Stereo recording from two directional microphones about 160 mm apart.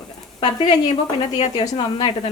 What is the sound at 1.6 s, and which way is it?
Speech, 25° left (ahead or behind).